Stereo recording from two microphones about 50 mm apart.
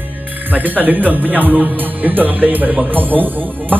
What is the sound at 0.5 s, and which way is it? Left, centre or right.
Music, right.